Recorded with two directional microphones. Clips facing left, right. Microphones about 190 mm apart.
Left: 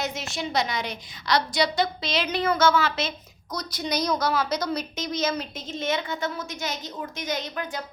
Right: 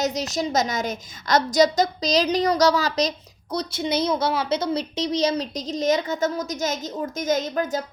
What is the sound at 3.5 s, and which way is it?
A woman's voice, 25° right (ahead or behind).